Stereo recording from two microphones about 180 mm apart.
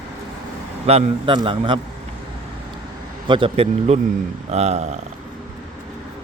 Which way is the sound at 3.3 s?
30° right (ahead or behind).